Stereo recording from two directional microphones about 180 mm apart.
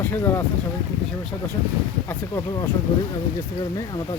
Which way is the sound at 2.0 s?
15° left (ahead or behind).